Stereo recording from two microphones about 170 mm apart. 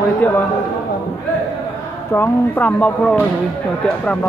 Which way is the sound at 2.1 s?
10° left (ahead or behind).